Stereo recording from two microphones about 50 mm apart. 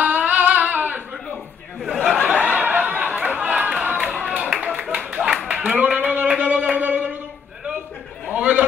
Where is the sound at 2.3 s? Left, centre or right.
Right.